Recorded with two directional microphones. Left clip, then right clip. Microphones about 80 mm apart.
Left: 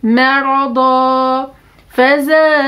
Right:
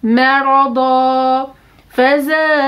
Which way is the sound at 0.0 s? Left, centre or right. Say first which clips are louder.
Even; left.